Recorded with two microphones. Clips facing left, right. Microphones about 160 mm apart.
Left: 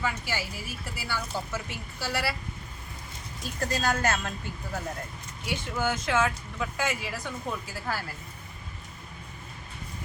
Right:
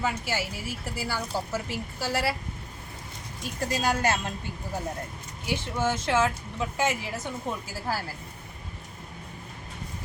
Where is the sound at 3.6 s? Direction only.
15° right (ahead or behind).